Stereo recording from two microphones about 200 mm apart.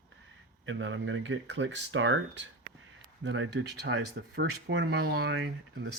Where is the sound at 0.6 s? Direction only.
70° right (ahead or behind).